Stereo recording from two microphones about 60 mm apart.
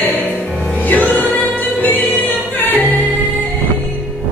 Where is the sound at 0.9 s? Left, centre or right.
Left.